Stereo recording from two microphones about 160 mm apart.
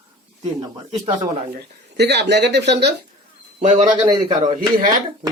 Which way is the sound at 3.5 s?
50° right (ahead or behind).